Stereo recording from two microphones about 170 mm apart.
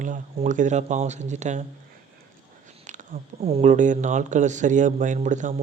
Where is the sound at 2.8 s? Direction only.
45° right (ahead or behind).